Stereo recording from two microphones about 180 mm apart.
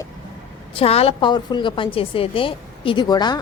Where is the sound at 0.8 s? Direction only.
35° left (ahead or behind).